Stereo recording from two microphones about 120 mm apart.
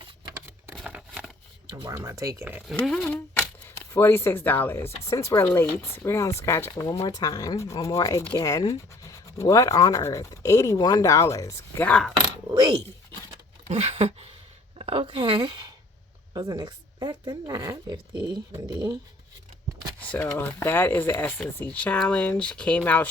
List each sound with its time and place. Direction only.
0.9 s crumpling: 5° right (ahead or behind)
1.9 s speech: 25° right (ahead or behind)
2.8 s speech: 5° left (ahead or behind)
3.9 s speech: 20° left (ahead or behind)
11.9 s speech: 5° left (ahead or behind)
13.7 s a sound: 60° right (ahead or behind)
14.8 s speech: 50° right (ahead or behind); by 18.9 s 35° right (ahead or behind)
20.0 s speech: 15° left (ahead or behind)